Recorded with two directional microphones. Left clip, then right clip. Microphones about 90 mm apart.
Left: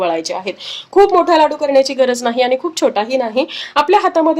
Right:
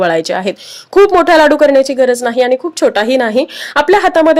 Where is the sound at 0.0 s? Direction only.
45° right (ahead or behind).